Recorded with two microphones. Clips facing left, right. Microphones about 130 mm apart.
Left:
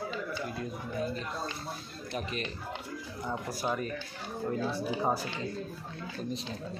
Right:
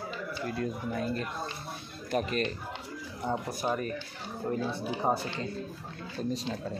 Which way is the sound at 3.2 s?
25° right (ahead or behind).